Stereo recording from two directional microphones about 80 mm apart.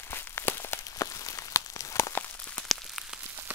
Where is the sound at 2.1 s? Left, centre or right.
Left.